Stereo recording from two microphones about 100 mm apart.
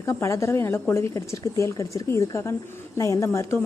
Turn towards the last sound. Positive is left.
turn(degrees=30)  # may be behind; listen again after turning